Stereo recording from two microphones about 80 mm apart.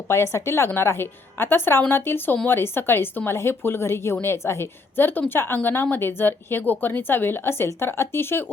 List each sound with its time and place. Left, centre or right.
0.1 s a woman's voice: left